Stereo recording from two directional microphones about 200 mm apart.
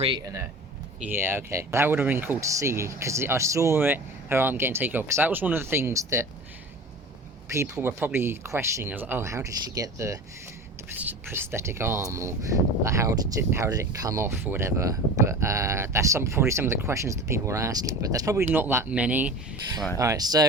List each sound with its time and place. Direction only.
0.0 s speech: 20° right (ahead or behind)
7.5 s speech: 10° right (ahead or behind)
20.0 s speech: 15° right (ahead or behind)